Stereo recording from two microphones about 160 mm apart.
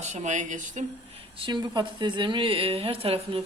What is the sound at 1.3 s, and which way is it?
A woman's voice, 30° right (ahead or behind).